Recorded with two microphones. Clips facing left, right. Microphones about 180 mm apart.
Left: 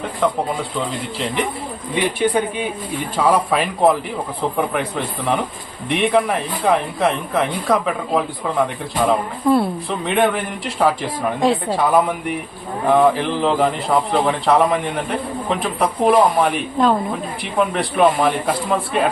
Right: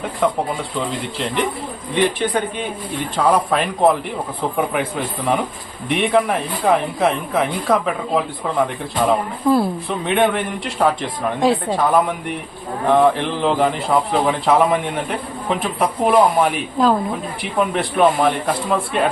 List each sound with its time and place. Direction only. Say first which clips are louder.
2.1 s speech: left 2 dB; 10° left (ahead or behind)
12.9 s speech: even; centre (ahead or behind)